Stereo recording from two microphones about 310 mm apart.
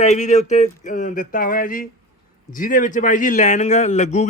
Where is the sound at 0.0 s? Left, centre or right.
Left.